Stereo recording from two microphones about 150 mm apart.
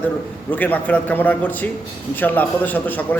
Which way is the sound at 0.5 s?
10° left (ahead or behind).